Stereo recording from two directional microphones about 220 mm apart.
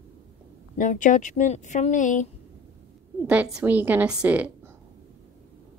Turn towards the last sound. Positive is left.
turn(degrees=-5)  # may be behind; listen again after turning